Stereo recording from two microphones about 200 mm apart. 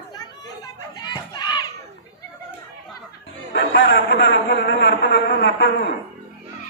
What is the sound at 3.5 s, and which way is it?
A man's voice, 60° left (ahead or behind).